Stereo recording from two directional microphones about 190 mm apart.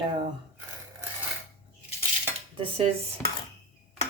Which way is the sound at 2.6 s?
30° right (ahead or behind).